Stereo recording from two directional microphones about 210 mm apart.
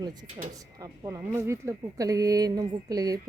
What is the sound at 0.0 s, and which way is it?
Speech, 20° right (ahead or behind).